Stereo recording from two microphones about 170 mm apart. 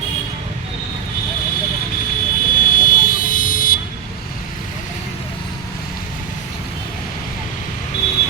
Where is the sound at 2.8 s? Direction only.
55° left (ahead or behind).